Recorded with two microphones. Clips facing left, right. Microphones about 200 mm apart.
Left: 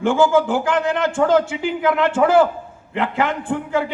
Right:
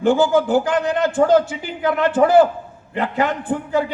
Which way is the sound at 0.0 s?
40° right (ahead or behind).